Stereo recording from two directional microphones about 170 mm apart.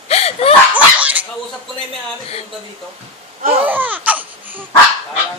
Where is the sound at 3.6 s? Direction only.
10° right (ahead or behind).